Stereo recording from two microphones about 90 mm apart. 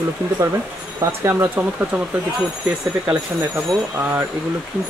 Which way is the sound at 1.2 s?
25° right (ahead or behind).